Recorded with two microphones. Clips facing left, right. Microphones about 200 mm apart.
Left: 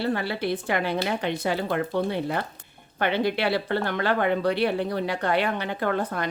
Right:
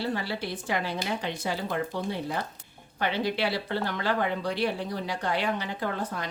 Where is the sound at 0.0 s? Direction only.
60° left (ahead or behind).